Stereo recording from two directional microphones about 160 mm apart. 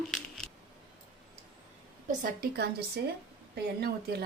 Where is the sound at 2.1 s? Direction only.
75° right (ahead or behind).